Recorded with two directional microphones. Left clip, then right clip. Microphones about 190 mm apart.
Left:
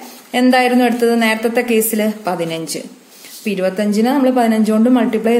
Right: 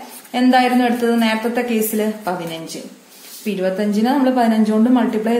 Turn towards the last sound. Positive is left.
turn(degrees=35)  # may be behind; listen again after turning